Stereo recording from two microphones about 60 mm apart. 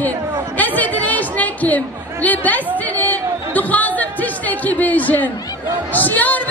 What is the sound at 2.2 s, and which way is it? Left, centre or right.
Chatter, left.